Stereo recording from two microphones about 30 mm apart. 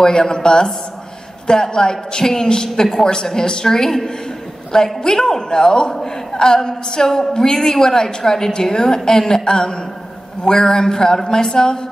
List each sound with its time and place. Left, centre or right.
0.2 s a woman's voice: left